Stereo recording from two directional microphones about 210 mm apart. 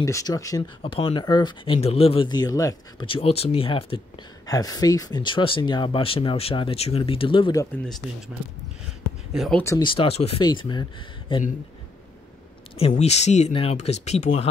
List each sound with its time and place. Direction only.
0.0 s speech: 15° left (ahead or behind)
9.3 s speech: centre (ahead or behind)
9.6 s speech: 15° left (ahead or behind)
12.7 s speech: 30° left (ahead or behind)